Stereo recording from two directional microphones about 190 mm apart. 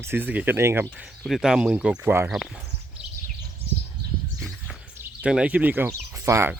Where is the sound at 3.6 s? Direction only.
30° right (ahead or behind).